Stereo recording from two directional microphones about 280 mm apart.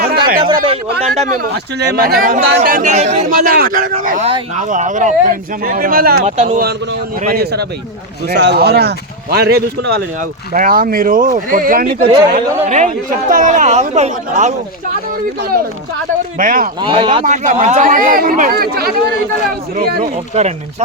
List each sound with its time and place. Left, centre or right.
0.0 s a sound: right
1.8 s speech: right
16.4 s speech: right
16.8 s speech: centre